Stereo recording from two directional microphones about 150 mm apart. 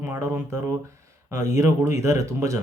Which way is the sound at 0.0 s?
15° right (ahead or behind).